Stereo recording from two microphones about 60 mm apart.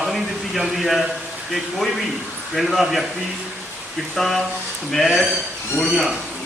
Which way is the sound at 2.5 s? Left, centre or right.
Centre.